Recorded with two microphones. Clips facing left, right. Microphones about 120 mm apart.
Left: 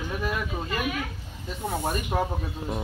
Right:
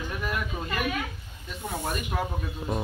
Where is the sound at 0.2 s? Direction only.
15° left (ahead or behind).